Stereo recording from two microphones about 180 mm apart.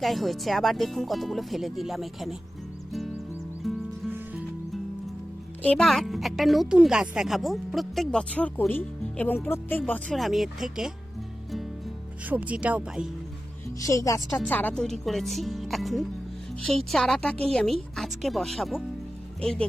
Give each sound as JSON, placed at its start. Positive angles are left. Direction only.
{"t": 0.0, "sound": "speech", "side_deg": 0}
{"t": 3.6, "sound": "music", "side_deg": 0}
{"t": 5.6, "sound": "speech", "side_deg": 0}
{"t": 12.3, "sound": "speech", "side_deg": -10}
{"t": 13.7, "sound": "speech", "side_deg": 20}